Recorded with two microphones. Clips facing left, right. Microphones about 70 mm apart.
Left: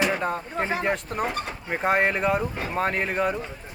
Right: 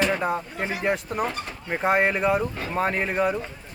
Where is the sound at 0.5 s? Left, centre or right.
Left.